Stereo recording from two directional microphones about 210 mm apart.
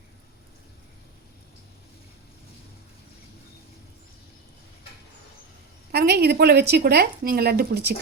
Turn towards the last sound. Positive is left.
turn(degrees=-50)  # may be behind; listen again after turning